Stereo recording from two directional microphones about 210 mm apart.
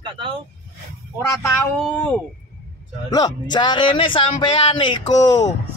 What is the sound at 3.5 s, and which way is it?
Speech, 20° left (ahead or behind).